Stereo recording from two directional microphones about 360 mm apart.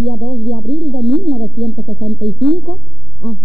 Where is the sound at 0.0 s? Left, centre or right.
Right.